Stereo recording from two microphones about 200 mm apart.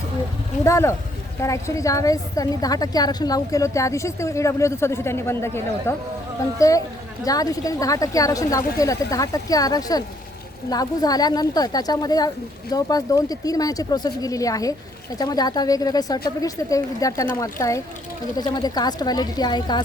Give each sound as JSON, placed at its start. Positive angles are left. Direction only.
{"t": 0.6, "sound": "a woman's voice", "side_deg": 15}